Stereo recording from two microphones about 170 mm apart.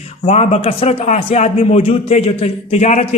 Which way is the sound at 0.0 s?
40° left (ahead or behind).